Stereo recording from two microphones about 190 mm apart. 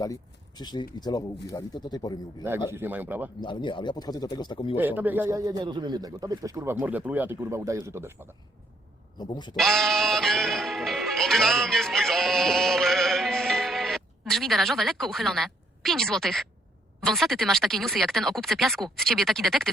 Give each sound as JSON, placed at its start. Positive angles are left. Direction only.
{"t": 0.0, "sound": "speech", "side_deg": 20}
{"t": 2.7, "sound": "a man's voice", "side_deg": -10}
{"t": 3.4, "sound": "speech", "side_deg": 25}
{"t": 4.8, "sound": "a man's voice", "side_deg": -10}
{"t": 9.1, "sound": "speech", "side_deg": 20}
{"t": 9.6, "sound": "music", "side_deg": 0}
{"t": 17.0, "sound": "speech", "side_deg": 0}